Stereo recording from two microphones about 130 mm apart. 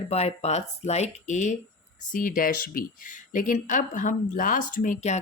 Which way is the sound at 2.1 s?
90° left.